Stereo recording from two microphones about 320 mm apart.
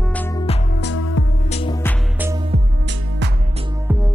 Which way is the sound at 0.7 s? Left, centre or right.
Left.